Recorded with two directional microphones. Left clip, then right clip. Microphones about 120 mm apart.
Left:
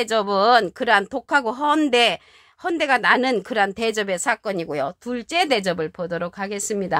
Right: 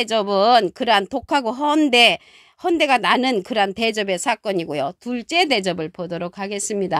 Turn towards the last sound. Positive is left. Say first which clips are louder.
# right 1 dB
turn(degrees=-50)  # may be behind; listen again after turning